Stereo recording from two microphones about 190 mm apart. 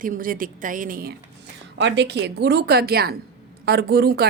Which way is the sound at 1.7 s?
65° right (ahead or behind).